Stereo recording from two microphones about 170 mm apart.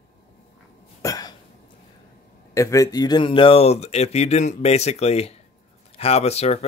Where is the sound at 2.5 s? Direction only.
20° left (ahead or behind); by 6.6 s 40° left (ahead or behind).